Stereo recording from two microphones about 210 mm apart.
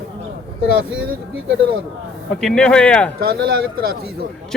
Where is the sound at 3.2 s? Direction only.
45° right (ahead or behind).